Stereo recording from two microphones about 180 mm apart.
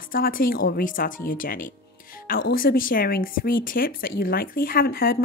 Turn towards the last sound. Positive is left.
turn(degrees=55)  # may be behind; listen again after turning